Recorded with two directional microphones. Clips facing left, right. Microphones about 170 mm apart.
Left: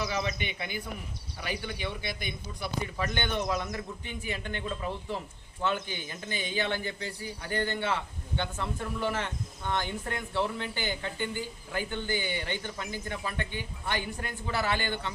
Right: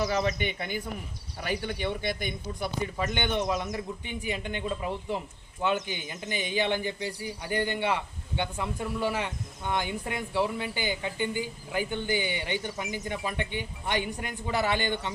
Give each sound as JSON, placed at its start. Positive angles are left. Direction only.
{"t": 0.0, "sound": "speech", "side_deg": -45}
{"t": 3.0, "sound": "speech", "side_deg": -15}